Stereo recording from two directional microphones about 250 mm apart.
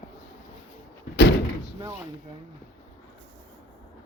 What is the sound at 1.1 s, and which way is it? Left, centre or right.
Door, left.